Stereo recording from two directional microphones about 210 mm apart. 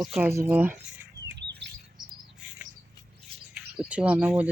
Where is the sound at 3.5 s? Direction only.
5° right (ahead or behind).